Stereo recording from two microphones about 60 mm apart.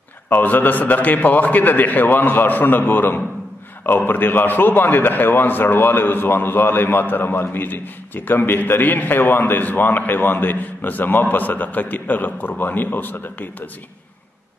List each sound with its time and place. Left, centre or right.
0.3 s a man's voice: left